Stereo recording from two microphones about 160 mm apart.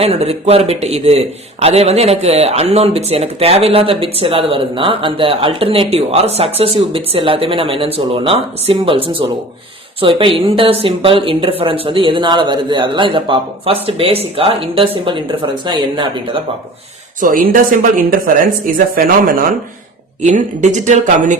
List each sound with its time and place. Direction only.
0.0 s speech: 40° right (ahead or behind)
17.2 s a woman's voice: 60° right (ahead or behind)
20.2 s speech: 50° right (ahead or behind)